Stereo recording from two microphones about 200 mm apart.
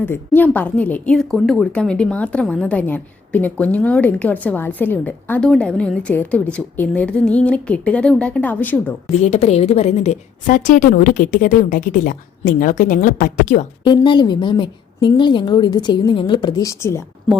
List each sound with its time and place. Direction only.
0.0 s a woman's voice: 10° left (ahead or behind)
9.1 s a woman's voice: 35° left (ahead or behind)
13.8 s a woman's voice: 20° left (ahead or behind)